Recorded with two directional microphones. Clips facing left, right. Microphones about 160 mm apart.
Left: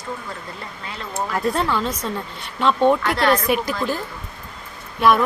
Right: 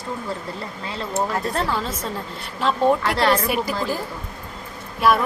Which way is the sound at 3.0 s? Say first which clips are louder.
Left 1 dB; 30° right (ahead or behind).